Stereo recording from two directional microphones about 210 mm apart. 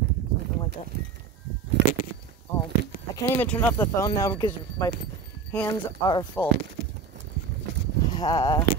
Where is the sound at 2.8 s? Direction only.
50° right (ahead or behind).